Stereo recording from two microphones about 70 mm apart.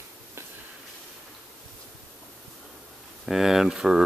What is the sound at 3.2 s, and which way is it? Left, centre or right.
Speech, centre.